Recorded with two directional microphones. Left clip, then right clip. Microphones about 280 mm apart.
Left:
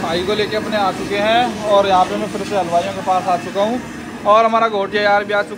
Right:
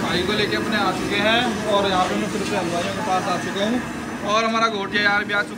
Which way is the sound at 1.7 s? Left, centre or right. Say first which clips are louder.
Left 8 dB; left.